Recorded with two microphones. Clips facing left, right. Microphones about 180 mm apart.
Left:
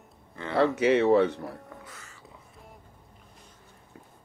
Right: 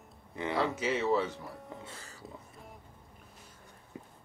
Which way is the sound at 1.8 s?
30° right (ahead or behind).